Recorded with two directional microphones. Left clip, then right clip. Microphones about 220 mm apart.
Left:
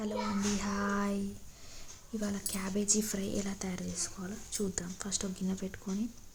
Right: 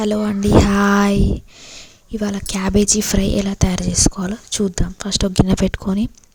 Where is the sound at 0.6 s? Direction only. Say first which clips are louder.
Right 19 dB; 45° right (ahead or behind).